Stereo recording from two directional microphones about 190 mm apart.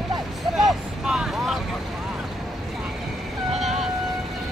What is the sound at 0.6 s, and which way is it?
Vehicle, centre (ahead or behind).